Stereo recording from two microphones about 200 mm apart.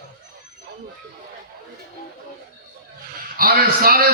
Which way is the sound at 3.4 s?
45° right (ahead or behind).